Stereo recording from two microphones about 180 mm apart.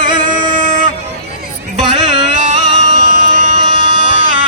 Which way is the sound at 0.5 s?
45° right (ahead or behind).